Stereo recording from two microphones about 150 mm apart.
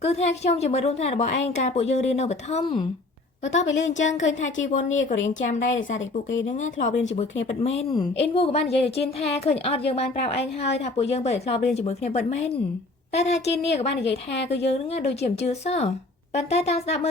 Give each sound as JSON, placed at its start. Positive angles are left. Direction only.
{"t": 0.0, "sound": "a woman's voice", "side_deg": 45}